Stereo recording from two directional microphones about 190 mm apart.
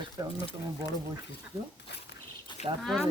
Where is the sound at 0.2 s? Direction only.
20° right (ahead or behind).